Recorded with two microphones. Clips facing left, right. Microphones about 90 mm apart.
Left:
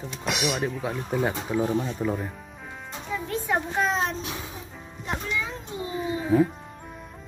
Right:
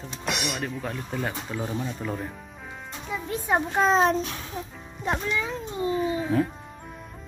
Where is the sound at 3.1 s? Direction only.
10° right (ahead or behind).